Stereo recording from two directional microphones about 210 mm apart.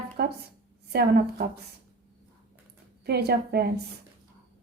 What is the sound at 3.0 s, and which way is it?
Speech, 50° right (ahead or behind).